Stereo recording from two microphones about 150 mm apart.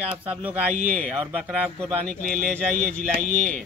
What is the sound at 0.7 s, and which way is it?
Speech, 60° right (ahead or behind).